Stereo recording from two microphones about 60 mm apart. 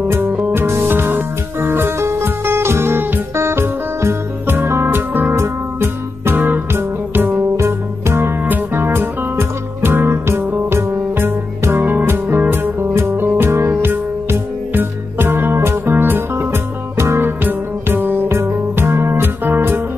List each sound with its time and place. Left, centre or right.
0.3 s music: right
0.6 s music: right
5.3 s music: right
17.4 s music: right